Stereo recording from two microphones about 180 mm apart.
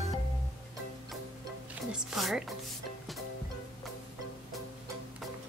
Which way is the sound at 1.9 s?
Centre (ahead or behind).